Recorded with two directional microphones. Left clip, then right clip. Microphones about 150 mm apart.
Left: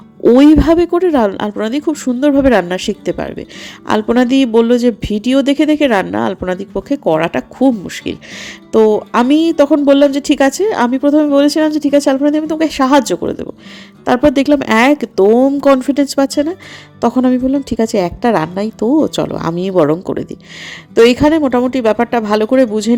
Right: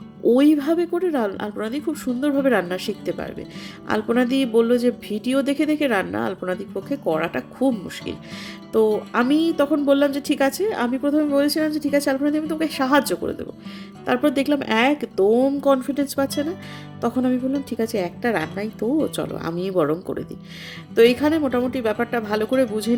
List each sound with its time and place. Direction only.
0.2 s speech: 35° left (ahead or behind)